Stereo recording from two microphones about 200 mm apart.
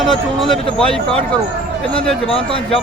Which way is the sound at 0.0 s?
Centre (ahead or behind).